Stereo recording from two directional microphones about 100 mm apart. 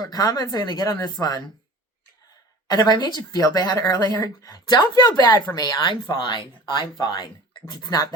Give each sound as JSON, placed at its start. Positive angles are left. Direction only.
{"t": 0.0, "sound": "speech", "side_deg": 40}
{"t": 1.2, "sound": "speech", "side_deg": 30}
{"t": 2.6, "sound": "a woman's voice", "side_deg": 45}
{"t": 3.8, "sound": "speech", "side_deg": 30}
{"t": 6.1, "sound": "a woman's voice", "side_deg": 50}